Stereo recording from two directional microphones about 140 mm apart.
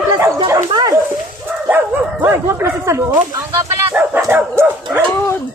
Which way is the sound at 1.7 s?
15° right (ahead or behind).